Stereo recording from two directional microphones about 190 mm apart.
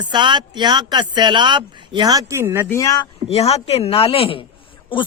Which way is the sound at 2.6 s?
15° left (ahead or behind).